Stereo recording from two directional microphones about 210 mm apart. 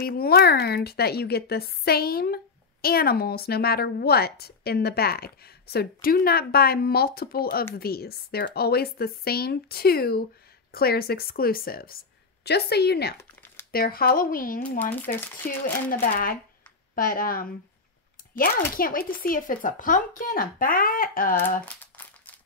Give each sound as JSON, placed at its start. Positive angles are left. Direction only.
{"t": 0.0, "sound": "a woman's voice", "side_deg": 45}
{"t": 13.2, "sound": "crumpling", "side_deg": 10}
{"t": 13.7, "sound": "a woman's voice", "side_deg": 45}
{"t": 14.8, "sound": "speech", "side_deg": 10}
{"t": 15.4, "sound": "a woman's voice", "side_deg": 40}
{"t": 18.8, "sound": "speech", "side_deg": 40}
{"t": 21.9, "sound": "a sound", "side_deg": 10}